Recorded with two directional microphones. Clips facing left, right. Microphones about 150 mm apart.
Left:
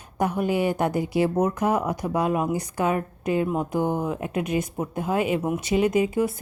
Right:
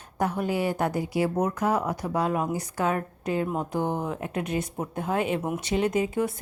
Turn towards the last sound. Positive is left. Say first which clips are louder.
# left 3 dB
turn(degrees=10)  # may be behind; listen again after turning